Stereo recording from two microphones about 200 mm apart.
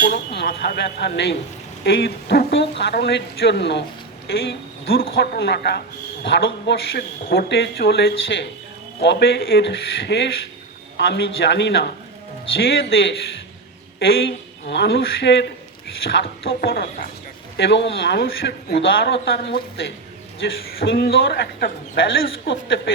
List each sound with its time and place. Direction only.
0.0 s a man's voice: 55° left (ahead or behind)
17.6 s a man's voice: 60° left (ahead or behind)